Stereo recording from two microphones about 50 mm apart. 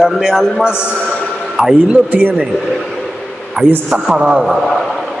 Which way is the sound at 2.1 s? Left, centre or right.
Right.